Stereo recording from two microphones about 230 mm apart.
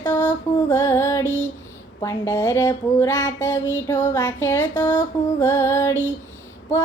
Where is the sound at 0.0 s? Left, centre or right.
Centre.